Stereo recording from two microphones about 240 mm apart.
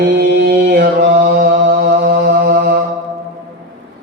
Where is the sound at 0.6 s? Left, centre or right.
Right.